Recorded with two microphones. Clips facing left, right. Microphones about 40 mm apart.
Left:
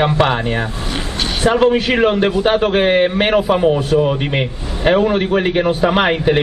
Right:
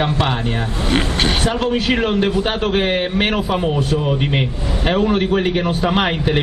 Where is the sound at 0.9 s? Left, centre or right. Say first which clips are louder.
Right 8 dB; right.